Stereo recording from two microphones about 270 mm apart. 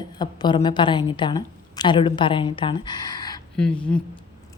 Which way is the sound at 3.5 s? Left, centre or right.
Centre.